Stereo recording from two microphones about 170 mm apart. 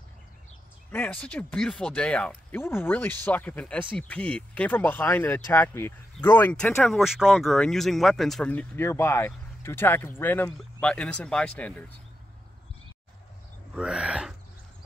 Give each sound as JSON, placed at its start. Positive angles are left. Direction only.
{"t": 0.9, "sound": "speech", "side_deg": 10}
{"t": 13.7, "sound": "speech", "side_deg": -5}